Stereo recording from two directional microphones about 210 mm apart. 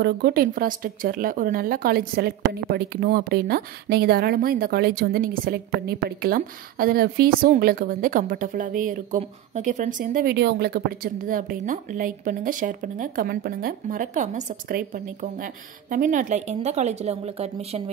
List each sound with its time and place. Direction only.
0.0 s a woman's voice: 50° right (ahead or behind); by 17.8 s 30° right (ahead or behind)